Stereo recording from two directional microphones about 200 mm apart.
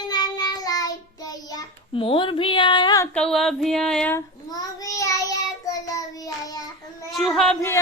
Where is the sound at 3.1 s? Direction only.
5° left (ahead or behind).